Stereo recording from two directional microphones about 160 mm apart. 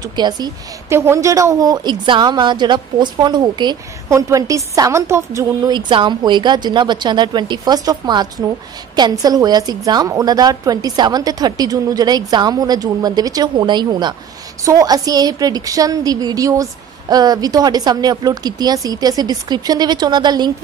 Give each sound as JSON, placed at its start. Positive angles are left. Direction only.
{"t": 0.1, "sound": "a woman's voice", "side_deg": -25}